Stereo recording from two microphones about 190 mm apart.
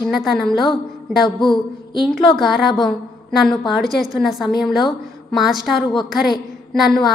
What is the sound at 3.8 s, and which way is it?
A woman's voice, centre (ahead or behind).